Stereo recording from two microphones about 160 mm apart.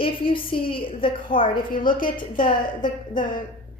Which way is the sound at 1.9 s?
60° left (ahead or behind).